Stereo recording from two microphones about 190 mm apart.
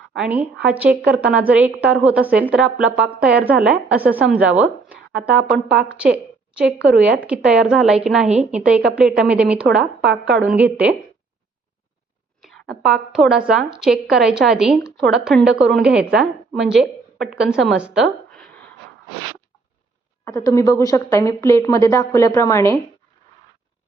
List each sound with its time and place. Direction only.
0.1 s a woman's voice: 5° right (ahead or behind)
8.3 s a woman's voice: 35° right (ahead or behind)
8.5 s a woman's voice: 5° right (ahead or behind)
12.4 s a woman's voice: centre (ahead or behind)
20.2 s a woman's voice: 15° left (ahead or behind)